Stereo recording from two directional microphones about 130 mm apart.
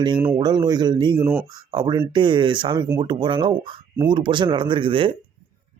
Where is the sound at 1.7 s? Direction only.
35° right (ahead or behind).